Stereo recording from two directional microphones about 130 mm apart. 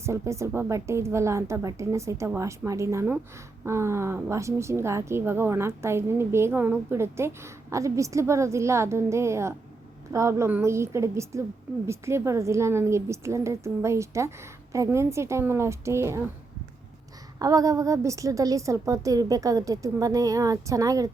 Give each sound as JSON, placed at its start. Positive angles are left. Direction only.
{"t": 0.0, "sound": "a woman's voice", "side_deg": -20}
{"t": 17.4, "sound": "a woman's voice", "side_deg": -25}